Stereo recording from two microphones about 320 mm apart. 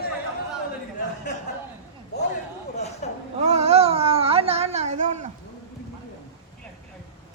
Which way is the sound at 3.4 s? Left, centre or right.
Centre.